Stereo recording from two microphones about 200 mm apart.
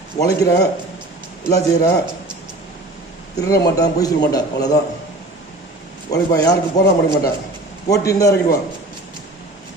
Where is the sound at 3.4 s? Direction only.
20° left (ahead or behind).